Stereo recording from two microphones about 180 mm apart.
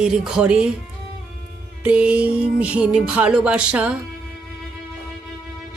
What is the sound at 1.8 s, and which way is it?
Music, 5° right (ahead or behind).